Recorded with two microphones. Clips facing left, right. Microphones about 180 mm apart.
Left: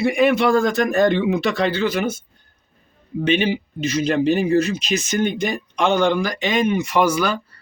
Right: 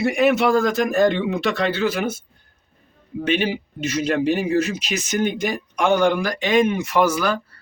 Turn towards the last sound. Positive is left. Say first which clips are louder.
# left 1 dB
turn(degrees=0)  # may be behind; listen again after turning